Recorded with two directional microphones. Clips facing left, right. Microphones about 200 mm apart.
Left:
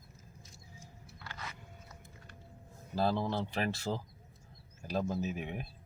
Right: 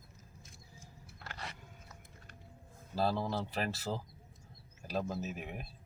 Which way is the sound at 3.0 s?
5° right (ahead or behind).